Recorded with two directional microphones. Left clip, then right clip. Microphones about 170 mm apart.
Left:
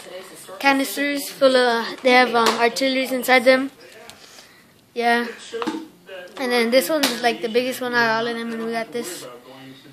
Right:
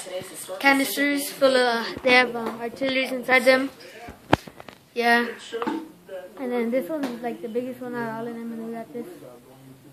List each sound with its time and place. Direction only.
0.6 s a woman's voice: 30° left (ahead or behind)
4.9 s a woman's voice: 30° left (ahead or behind)
6.4 s speech: 45° left (ahead or behind)